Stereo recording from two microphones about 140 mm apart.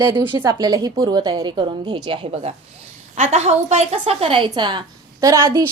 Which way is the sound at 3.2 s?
50° right (ahead or behind).